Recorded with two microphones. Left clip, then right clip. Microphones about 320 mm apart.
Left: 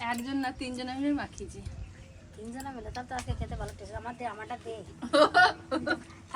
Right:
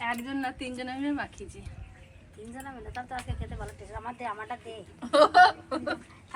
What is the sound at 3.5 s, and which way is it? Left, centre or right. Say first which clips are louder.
Speech: even; centre.